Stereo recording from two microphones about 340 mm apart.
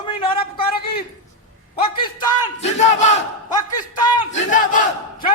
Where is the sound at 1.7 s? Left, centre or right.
Centre.